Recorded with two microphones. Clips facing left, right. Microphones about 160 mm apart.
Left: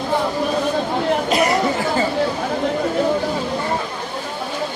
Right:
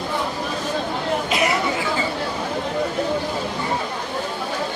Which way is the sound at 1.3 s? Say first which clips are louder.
Left 3 dB; 45° left (ahead or behind).